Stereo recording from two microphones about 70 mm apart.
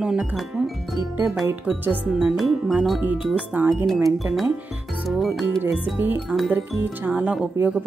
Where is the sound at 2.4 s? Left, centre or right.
Centre.